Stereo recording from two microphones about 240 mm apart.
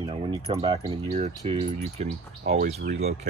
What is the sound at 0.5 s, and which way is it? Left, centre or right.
Speech, right.